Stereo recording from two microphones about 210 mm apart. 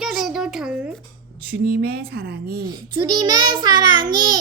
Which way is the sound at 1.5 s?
45° right (ahead or behind).